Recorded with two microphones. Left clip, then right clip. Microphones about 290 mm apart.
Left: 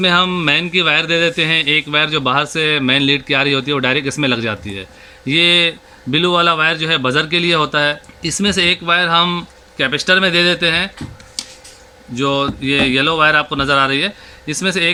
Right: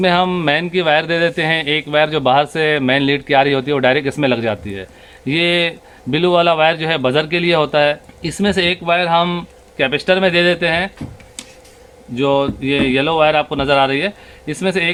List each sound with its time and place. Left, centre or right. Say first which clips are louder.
0.0 s speech: left 1 dB; right
12.1 s speech: right 2 dB; right